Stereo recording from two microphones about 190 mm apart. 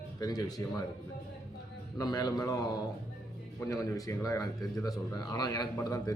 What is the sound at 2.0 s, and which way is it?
Speech, 20° left (ahead or behind).